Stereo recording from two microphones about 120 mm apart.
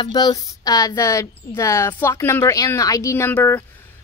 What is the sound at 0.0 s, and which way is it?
Speech, 35° left (ahead or behind).